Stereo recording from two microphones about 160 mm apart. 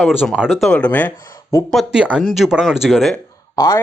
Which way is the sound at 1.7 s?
5° right (ahead or behind).